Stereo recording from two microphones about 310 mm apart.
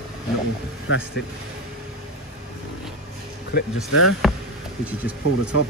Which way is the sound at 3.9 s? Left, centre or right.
Left.